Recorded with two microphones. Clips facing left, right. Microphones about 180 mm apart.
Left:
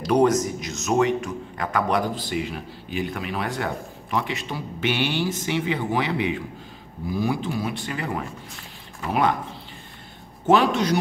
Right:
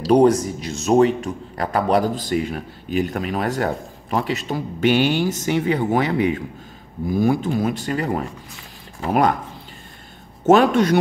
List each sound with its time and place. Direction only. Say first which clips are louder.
0.0 s a man's voice: right 4 dB; 35° right (ahead or behind)
10.5 s a man's voice: right 5 dB; 50° right (ahead or behind)